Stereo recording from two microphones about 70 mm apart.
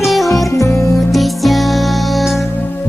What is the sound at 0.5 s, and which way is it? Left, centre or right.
Music, left.